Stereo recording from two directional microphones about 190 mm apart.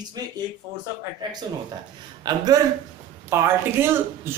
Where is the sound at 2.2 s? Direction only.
20° right (ahead or behind).